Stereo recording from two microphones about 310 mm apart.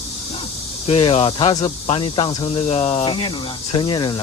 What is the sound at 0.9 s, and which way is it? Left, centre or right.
Speech, centre.